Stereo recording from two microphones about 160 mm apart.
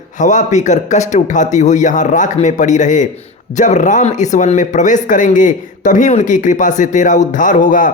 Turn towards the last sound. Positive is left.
turn(degrees=55)  # may be behind; listen again after turning